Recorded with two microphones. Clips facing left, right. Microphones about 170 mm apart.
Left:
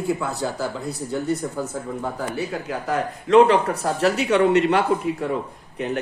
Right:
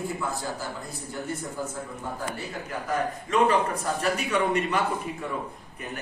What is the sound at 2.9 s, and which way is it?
Speech, 80° left.